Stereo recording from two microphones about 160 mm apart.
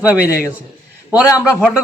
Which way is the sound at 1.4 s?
5° right (ahead or behind).